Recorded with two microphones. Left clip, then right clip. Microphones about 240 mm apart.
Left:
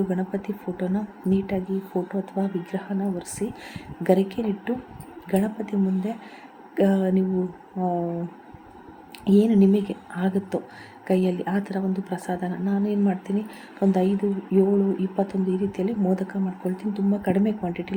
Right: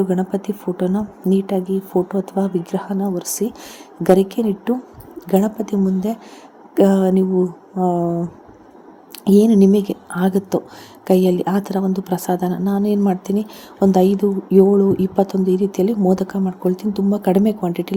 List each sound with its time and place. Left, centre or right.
0.1 s speech: right
9.2 s speech: right